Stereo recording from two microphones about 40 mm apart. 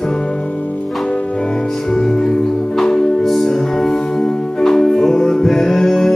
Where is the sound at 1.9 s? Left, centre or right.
Centre.